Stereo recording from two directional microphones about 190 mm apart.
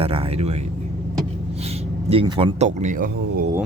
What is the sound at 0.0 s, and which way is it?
Speech, 30° right (ahead or behind).